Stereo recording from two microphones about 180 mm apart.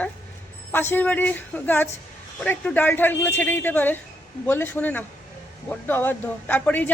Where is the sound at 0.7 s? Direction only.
10° left (ahead or behind).